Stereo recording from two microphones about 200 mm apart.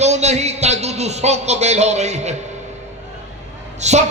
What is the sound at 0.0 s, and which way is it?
A man's voice, 35° right (ahead or behind).